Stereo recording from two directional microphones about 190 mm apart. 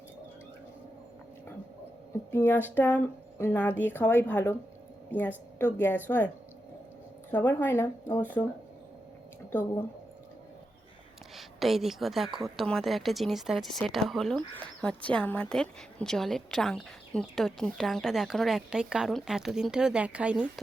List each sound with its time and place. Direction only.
2.3 s speech: 10° left (ahead or behind)
5.7 s speech: 10° left (ahead or behind)
11.3 s a woman's voice: centre (ahead or behind)